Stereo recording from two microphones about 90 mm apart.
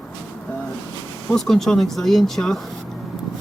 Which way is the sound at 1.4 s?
5° left (ahead or behind).